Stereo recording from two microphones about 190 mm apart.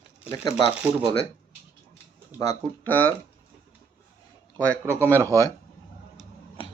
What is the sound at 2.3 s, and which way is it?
Speech, 10° left (ahead or behind).